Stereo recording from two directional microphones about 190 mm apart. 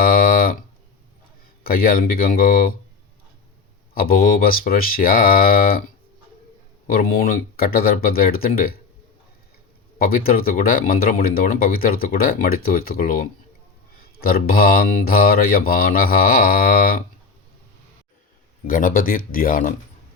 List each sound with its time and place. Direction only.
0.0 s a sound: 50° left (ahead or behind)
1.6 s speech: 50° left (ahead or behind)
3.9 s speech: 50° left (ahead or behind)
6.8 s speech: 50° left (ahead or behind)
10.0 s speech: 50° left (ahead or behind)
18.7 s speech: 45° left (ahead or behind)